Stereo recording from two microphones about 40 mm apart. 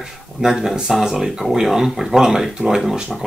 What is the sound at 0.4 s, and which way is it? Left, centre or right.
Speech, centre.